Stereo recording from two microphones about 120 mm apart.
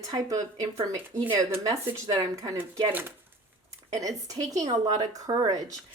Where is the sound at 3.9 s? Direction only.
30° right (ahead or behind).